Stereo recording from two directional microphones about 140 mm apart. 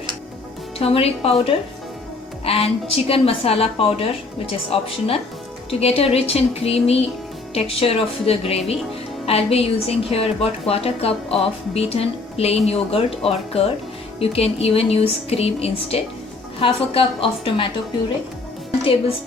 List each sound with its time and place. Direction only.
0.8 s a woman's voice: 45° left (ahead or behind)